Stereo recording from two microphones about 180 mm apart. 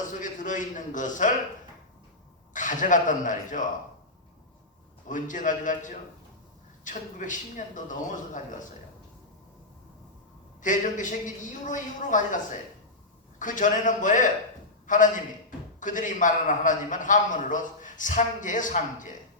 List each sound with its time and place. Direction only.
0.1 s a man's voice: 45° left (ahead or behind)
2.5 s a man's voice: 45° left (ahead or behind)
5.0 s a man's voice: 45° left (ahead or behind)
10.6 s a man's voice: 45° left (ahead or behind)